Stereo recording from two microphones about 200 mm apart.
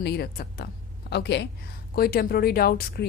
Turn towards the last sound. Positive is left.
turn(degrees=50)  # may be behind; listen again after turning